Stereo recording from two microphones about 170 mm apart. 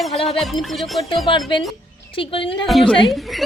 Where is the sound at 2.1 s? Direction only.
30° left (ahead or behind).